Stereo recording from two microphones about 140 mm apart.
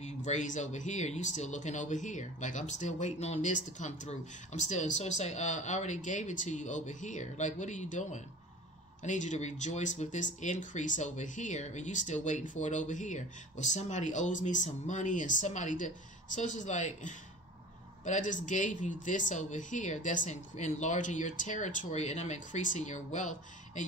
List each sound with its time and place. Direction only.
0.0 s speech: 60° left (ahead or behind)